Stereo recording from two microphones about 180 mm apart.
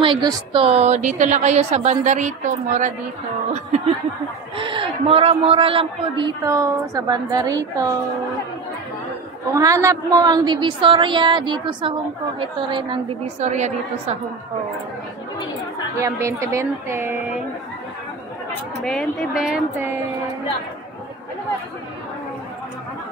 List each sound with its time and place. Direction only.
0.0 s a woman's voice: 25° right (ahead or behind)
9.5 s a man's voice: 15° right (ahead or behind)
13.4 s a woman's voice: 40° right (ahead or behind)
16.0 s speech: 15° right (ahead or behind)
18.8 s speech: centre (ahead or behind)